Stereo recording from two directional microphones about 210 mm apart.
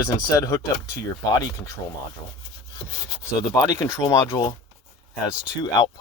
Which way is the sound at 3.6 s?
15° left (ahead or behind).